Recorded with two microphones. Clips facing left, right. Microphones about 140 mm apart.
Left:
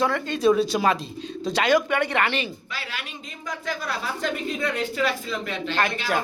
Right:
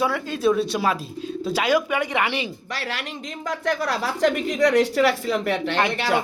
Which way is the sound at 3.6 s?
70° right (ahead or behind).